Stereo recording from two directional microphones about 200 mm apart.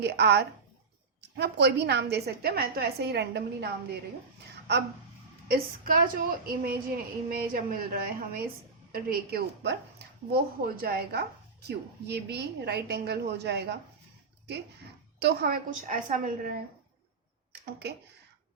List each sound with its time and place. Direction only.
0.0 s a woman's voice: 55° right (ahead or behind)
5.5 s a woman's voice: 50° right (ahead or behind)
15.2 s a woman's voice: 50° right (ahead or behind)
17.5 s a sound: 50° right (ahead or behind)